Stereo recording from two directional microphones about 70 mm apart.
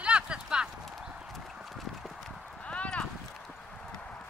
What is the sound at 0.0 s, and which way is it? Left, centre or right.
Clip-clop, centre.